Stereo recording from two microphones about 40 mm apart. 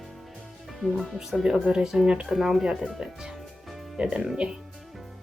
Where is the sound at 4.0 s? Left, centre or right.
Right.